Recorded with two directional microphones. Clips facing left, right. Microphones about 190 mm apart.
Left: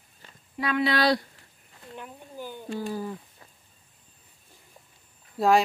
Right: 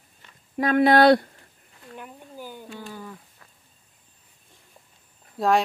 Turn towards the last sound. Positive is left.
turn(degrees=0)  # may be behind; listen again after turning